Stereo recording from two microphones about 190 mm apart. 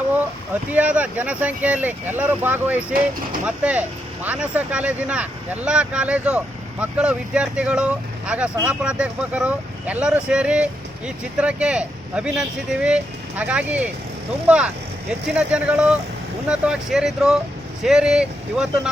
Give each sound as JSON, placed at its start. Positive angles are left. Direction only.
{"t": 0.7, "sound": "speech", "side_deg": -5}